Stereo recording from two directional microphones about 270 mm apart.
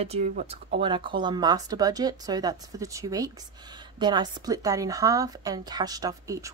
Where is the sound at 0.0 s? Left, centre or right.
Right.